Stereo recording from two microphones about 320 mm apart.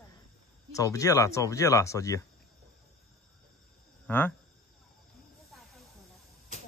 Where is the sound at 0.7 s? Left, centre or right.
Centre.